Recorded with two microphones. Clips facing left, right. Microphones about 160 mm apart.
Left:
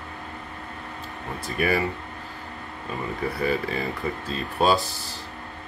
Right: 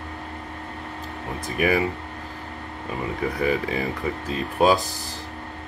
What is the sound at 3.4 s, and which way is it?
Speech, 15° right (ahead or behind).